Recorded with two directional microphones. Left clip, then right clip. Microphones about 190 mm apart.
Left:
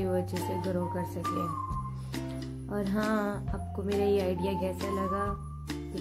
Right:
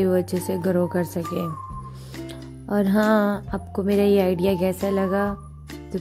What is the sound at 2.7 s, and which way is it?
A woman's voice, 40° right (ahead or behind).